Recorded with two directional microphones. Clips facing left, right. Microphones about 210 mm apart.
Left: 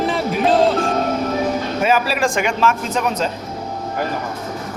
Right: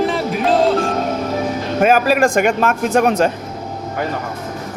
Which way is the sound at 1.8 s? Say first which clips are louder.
Right 6 dB; 50° right (ahead or behind).